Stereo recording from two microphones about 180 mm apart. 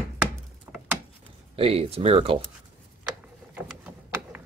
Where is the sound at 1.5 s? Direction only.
30° right (ahead or behind).